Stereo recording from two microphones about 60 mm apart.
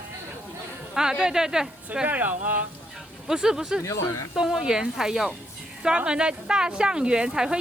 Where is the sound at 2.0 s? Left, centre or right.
Right.